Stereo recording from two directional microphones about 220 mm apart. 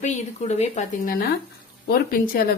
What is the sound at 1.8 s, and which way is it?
Speech, 40° left (ahead or behind).